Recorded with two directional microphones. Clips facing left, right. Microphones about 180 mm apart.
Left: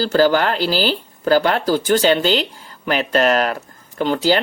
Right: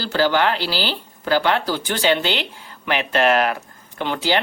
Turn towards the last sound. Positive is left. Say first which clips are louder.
# left 5 dB
turn(degrees=40)  # may be behind; listen again after turning